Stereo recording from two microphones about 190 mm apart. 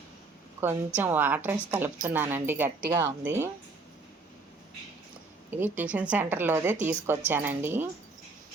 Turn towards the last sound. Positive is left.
turn(degrees=-10)  # may be behind; listen again after turning